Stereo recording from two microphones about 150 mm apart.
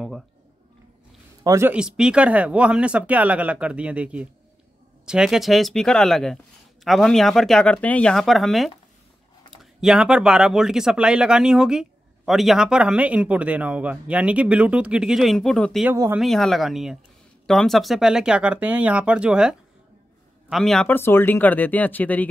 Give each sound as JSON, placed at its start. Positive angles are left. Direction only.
{"t": 1.4, "sound": "a man's voice", "side_deg": -20}
{"t": 1.7, "sound": "speech", "side_deg": -5}
{"t": 15.8, "sound": "speech", "side_deg": -15}
{"t": 16.2, "sound": "speech", "side_deg": 0}